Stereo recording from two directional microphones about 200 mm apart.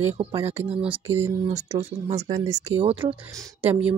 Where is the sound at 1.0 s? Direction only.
15° right (ahead or behind).